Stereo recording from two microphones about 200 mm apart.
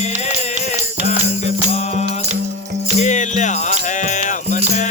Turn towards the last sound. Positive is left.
turn(degrees=35)  # may be behind; listen again after turning